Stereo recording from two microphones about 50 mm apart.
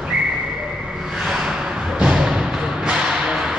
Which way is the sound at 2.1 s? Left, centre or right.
Centre.